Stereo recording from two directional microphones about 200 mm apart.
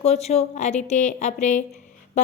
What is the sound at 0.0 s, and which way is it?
A woman's voice, 35° left (ahead or behind).